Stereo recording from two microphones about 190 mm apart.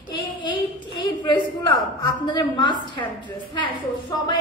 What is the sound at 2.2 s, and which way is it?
Speech, 25° left (ahead or behind).